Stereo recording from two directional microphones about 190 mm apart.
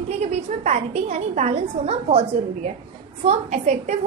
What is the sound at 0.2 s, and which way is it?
A woman's voice, 35° right (ahead or behind).